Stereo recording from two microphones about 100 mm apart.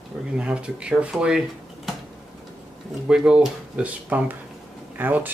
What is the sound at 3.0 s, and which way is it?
Speech, 10° right (ahead or behind).